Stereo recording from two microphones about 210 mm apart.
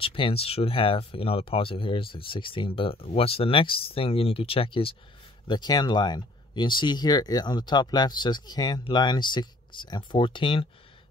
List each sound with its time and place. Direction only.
0.0 s speech: 25° left (ahead or behind)